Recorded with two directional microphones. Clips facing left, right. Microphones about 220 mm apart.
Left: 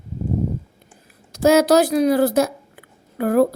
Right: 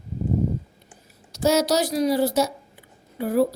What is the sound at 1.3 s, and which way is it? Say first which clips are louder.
A woman's voice: left 6 dB; 55° left (ahead or behind).